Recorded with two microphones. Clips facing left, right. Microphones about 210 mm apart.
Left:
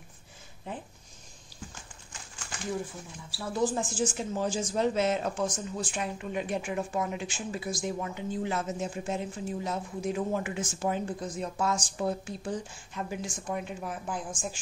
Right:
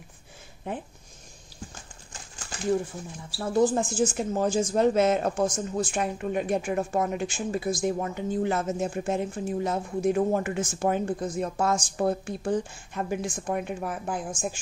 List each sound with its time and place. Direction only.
3.3 s speech: 45° right (ahead or behind)